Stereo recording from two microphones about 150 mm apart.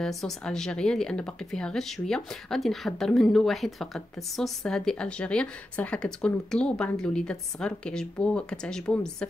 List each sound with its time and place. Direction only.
0.0 s speech: centre (ahead or behind)